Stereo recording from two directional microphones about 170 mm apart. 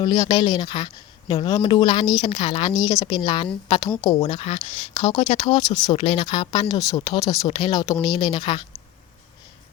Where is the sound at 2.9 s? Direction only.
20° left (ahead or behind).